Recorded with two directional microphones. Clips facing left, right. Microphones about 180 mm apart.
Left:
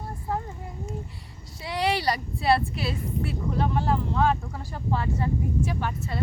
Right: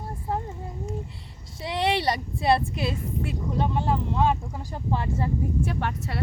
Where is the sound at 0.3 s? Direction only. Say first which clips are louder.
Right 1 dB; 20° right (ahead or behind).